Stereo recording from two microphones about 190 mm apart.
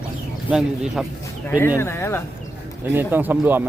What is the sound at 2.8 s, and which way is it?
Speech, 10° right (ahead or behind).